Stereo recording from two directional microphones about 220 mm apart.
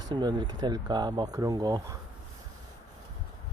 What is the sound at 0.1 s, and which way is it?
Speech, 20° right (ahead or behind).